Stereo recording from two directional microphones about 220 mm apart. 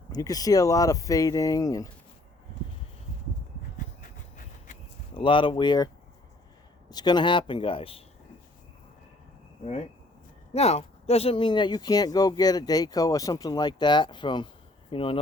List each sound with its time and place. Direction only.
0.1 s speech: 15° left (ahead or behind)
5.1 s speech: 25° left (ahead or behind)
6.9 s speech: 20° left (ahead or behind)
10.5 s speech: 30° left (ahead or behind)